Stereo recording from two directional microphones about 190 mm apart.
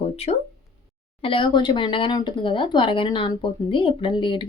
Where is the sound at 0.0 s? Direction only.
35° left (ahead or behind).